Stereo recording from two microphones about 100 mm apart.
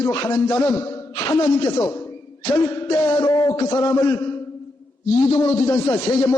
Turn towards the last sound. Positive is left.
turn(degrees=40)  # may be behind; listen again after turning